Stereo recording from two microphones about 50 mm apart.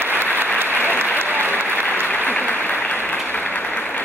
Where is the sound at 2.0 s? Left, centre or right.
Left.